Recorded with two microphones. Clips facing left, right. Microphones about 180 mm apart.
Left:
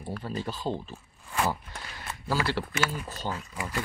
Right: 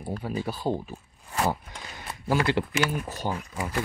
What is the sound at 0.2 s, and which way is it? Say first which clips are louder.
Speech: right 3 dB; 10° right (ahead or behind).